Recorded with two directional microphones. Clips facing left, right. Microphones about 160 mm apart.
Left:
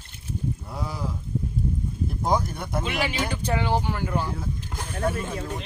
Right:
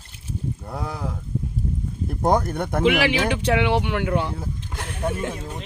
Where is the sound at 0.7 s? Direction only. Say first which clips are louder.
Right 2 dB; 60° right (ahead or behind).